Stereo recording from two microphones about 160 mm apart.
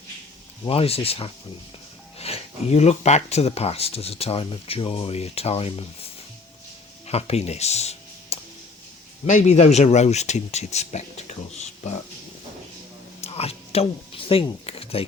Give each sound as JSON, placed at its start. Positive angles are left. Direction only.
{"t": 0.6, "sound": "speech", "side_deg": 35}
{"t": 7.1, "sound": "speech", "side_deg": 40}
{"t": 13.2, "sound": "a sound", "side_deg": 40}